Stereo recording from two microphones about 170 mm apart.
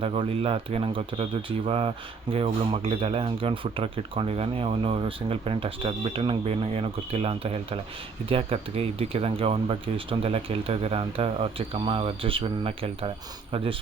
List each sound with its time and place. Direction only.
0.0 s speech: 35° right (ahead or behind)